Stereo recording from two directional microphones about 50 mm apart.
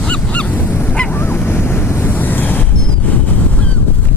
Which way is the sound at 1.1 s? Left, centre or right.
Left.